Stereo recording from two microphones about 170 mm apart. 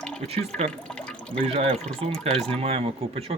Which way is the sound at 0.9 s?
5° left (ahead or behind).